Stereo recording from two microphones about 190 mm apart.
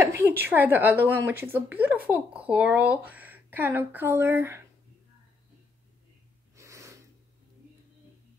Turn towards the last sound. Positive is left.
turn(degrees=-15)  # may be behind; listen again after turning